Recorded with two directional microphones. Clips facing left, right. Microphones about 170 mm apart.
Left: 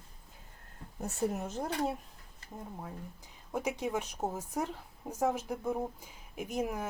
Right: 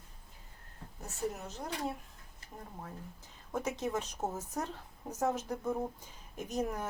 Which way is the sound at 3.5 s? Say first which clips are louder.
Left 1 dB; 10° left (ahead or behind).